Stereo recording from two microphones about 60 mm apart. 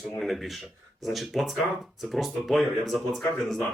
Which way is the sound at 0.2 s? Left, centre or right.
Centre.